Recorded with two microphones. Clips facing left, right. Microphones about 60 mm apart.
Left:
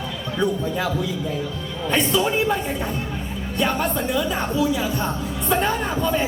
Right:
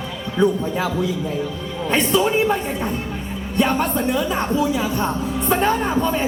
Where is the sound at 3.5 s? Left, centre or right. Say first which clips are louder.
Right 3 dB; right.